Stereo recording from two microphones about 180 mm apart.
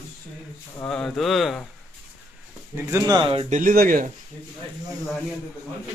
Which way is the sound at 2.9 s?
20° right (ahead or behind).